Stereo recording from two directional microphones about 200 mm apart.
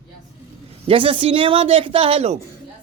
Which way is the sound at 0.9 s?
25° right (ahead or behind).